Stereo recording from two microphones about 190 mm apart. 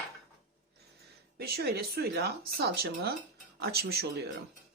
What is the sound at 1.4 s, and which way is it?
Speech, 55° right (ahead or behind).